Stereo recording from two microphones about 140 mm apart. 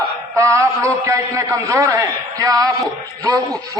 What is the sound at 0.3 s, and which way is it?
A man's voice, 20° right (ahead or behind).